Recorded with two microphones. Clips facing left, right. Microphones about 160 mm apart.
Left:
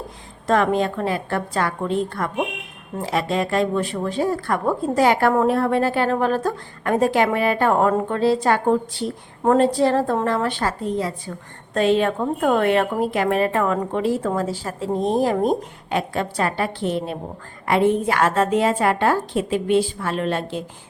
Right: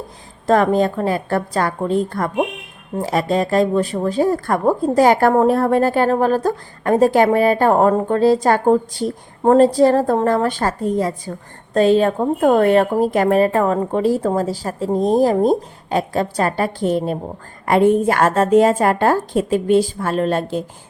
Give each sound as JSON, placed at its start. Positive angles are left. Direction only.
{"t": 0.4, "sound": "a woman's voice", "side_deg": -40}